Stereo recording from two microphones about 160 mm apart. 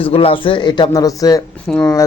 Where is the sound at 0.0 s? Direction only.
35° left (ahead or behind).